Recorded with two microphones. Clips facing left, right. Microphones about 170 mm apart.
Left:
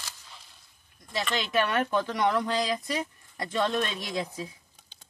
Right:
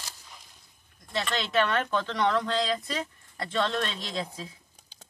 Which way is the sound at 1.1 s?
10° left (ahead or behind).